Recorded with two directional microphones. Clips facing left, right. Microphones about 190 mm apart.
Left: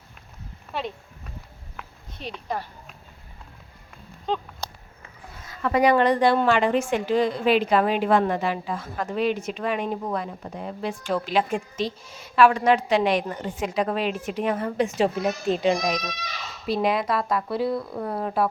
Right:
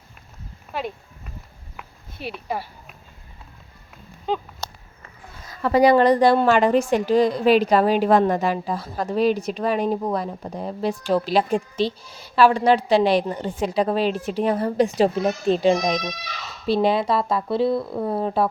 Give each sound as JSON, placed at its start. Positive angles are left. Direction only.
{"t": 0.7, "sound": "speech", "side_deg": -5}
{"t": 1.7, "sound": "walk", "side_deg": -10}
{"t": 4.3, "sound": "a sound", "side_deg": -5}
{"t": 5.5, "sound": "a woman's voice", "side_deg": -35}